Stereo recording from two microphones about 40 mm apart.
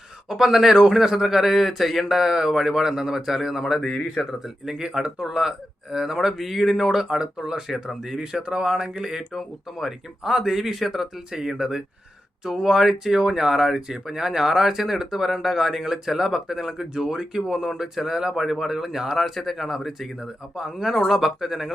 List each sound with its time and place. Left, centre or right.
0.3 s speech: centre
3.8 s speech: centre
4.7 s speech: right; by 11.1 s centre
11.3 s speech: centre